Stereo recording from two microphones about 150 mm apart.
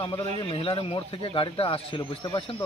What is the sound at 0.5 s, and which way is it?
Speech, 40° left (ahead or behind).